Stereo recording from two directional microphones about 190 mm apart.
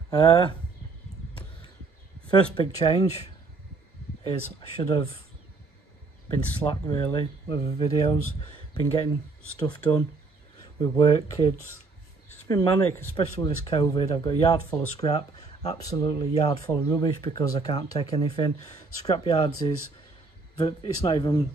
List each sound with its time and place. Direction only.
0.2 s speech: 25° left (ahead or behind)
2.5 s speech: 25° left (ahead or behind)
6.7 s speech: 25° left (ahead or behind)
13.4 s speech: 30° left (ahead or behind)
15.4 s a sound: 35° left (ahead or behind)
15.8 s speech: 25° left (ahead or behind)